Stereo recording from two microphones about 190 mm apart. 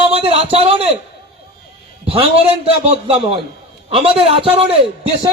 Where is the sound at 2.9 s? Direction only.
30° right (ahead or behind).